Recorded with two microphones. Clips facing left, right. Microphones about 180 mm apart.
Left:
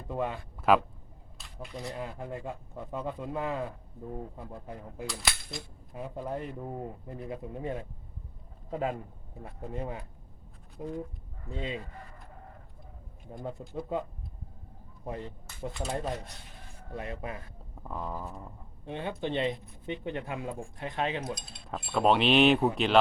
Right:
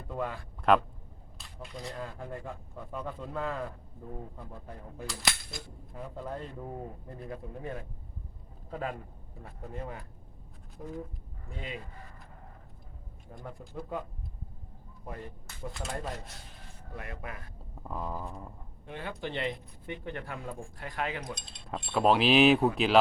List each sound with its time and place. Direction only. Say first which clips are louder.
0.1 s speech: left 3 dB; 20° left (ahead or behind)
0.6 s speech: even; 5° left (ahead or behind)
1.4 s a sound: left 2 dB; centre (ahead or behind)
1.9 s speech: left 2 dB; 15° left (ahead or behind)
5.0 s cap gun: right 1 dB; centre (ahead or behind)
5.9 s a man's voice: left 3 dB; 15° left (ahead or behind)
13.4 s speech: left 5 dB; 20° left (ahead or behind)
15.0 s speech: left 4 dB; 20° left (ahead or behind)
16.9 s speech: left 5 dB; 25° left (ahead or behind)
17.8 s cutlery: even; centre (ahead or behind)
18.9 s speech: left 4 dB; 20° left (ahead or behind)
21.3 s cutlery: even; 5° left (ahead or behind)